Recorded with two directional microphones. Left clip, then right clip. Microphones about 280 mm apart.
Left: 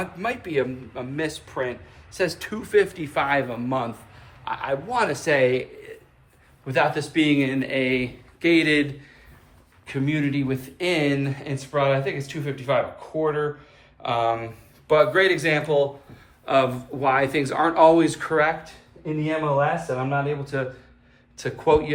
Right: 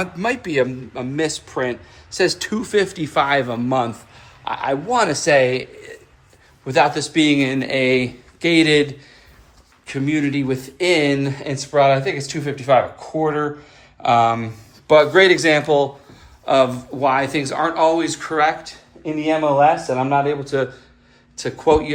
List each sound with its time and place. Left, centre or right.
0.0 s speech: centre